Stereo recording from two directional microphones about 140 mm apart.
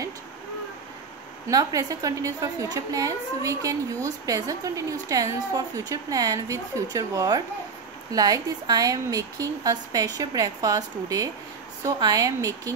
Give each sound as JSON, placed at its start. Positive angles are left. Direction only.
{"t": 1.5, "sound": "a woman's voice", "side_deg": -25}